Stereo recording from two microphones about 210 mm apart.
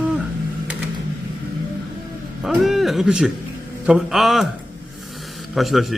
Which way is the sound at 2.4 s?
Centre (ahead or behind).